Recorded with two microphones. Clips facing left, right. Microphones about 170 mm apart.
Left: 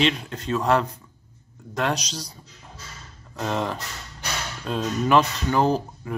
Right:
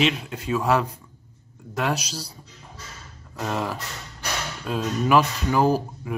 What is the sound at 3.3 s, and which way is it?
Speech, 5° right (ahead or behind).